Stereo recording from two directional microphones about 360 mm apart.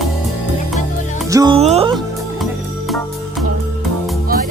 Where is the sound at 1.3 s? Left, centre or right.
Centre.